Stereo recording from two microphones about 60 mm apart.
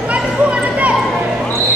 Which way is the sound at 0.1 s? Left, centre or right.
Right.